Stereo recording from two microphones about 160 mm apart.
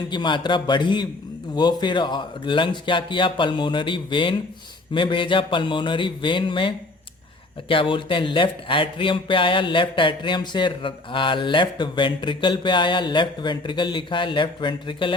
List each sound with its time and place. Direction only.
0.1 s a man's voice: 30° left (ahead or behind)